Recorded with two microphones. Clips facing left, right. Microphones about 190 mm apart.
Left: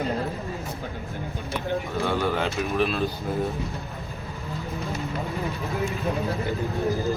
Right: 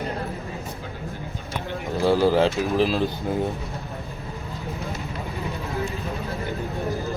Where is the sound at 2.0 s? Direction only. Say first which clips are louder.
Right 9 dB; 30° right (ahead or behind).